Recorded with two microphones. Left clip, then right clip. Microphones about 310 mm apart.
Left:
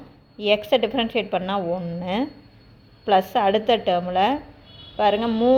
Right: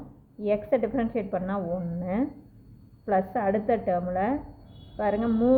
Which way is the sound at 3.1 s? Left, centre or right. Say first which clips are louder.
Left 7 dB; centre.